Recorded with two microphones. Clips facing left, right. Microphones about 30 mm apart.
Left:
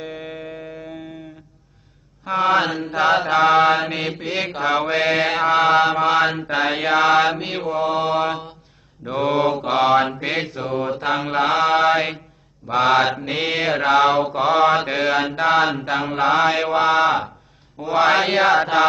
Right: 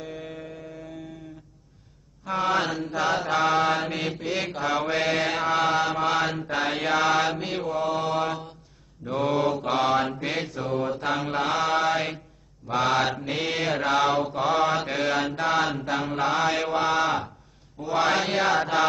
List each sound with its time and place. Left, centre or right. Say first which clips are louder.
0.0 s a sound: left 5 dB; left
2.2 s mantra: left 7 dB; left
2.9 s mantra: left 9 dB; left
11.3 s mantra: left 8 dB; left